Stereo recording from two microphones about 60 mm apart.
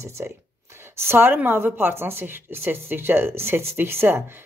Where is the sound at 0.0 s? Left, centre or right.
Right.